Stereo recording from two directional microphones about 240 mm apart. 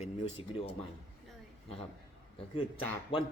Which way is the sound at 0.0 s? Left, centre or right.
Left.